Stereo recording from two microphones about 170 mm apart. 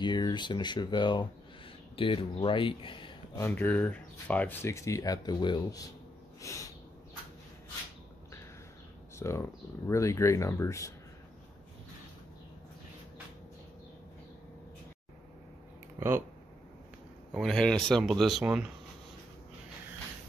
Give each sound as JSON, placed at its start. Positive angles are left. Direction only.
{"t": 0.0, "sound": "speech", "side_deg": 25}
{"t": 3.3, "sound": "speech", "side_deg": 10}
{"t": 6.4, "sound": "snort", "side_deg": 20}
{"t": 9.2, "sound": "speech", "side_deg": 15}
{"t": 16.0, "sound": "speech", "side_deg": -15}
{"t": 17.3, "sound": "speech", "side_deg": 0}